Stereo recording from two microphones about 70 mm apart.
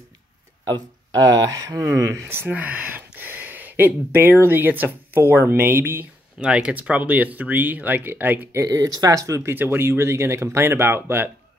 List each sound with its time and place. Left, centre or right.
0.7 s speech: right
2.5 s a sound: right
4.4 s speech: right
6.4 s speech: centre
8.6 s speech: right
9.4 s speech: right